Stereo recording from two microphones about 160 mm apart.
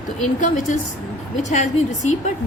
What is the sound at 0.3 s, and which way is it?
A woman's voice, 50° left (ahead or behind).